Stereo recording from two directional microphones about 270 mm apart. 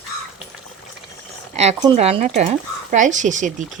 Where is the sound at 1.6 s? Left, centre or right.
Right.